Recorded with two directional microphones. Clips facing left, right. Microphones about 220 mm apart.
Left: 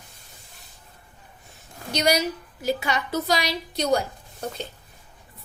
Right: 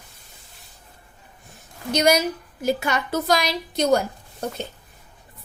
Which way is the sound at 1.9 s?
50° right (ahead or behind).